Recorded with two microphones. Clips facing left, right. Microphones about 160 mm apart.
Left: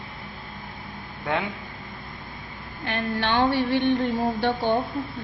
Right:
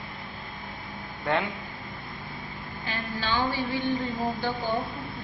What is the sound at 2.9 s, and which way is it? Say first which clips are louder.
A woman's voice: left 6 dB; 65° left (ahead or behind).